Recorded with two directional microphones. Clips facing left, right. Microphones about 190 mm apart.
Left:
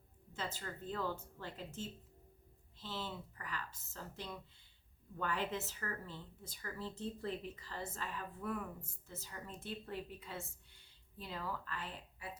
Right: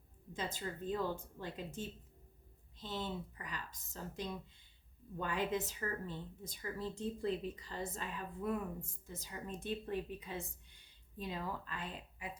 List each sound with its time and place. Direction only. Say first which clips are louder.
0.3 s speech: right 3 dB; 15° right (ahead or behind)